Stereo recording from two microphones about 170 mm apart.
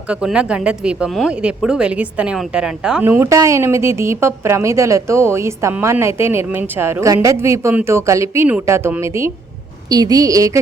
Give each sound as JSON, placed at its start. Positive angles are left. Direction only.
{"t": 0.1, "sound": "a woman's voice", "side_deg": -5}